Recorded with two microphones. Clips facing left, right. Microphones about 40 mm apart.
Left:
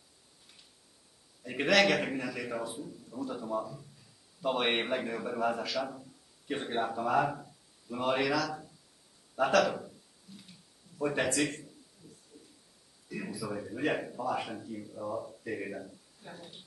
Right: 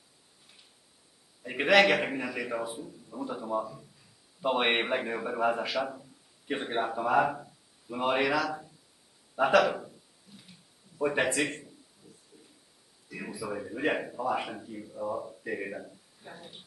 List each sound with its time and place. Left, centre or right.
1.4 s a man's voice: centre
9.3 s a sound: centre
11.0 s a man's voice: centre
13.1 s speech: centre